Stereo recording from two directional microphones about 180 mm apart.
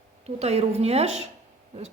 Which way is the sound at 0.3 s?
35° right (ahead or behind).